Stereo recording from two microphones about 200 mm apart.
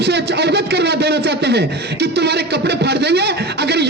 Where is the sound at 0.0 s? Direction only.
55° right (ahead or behind).